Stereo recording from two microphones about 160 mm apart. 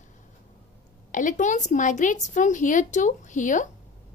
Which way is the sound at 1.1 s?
50° left (ahead or behind).